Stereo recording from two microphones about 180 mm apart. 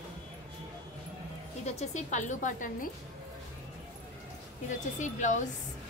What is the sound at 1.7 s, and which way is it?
A woman's voice, 40° left (ahead or behind).